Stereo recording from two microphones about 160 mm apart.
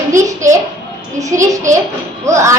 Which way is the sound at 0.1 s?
20° right (ahead or behind).